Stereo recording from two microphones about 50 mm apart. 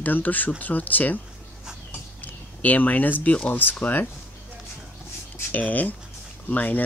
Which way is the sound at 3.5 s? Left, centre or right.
Left.